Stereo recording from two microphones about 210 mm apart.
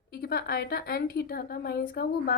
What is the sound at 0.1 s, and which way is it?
A woman's voice, 50° left (ahead or behind).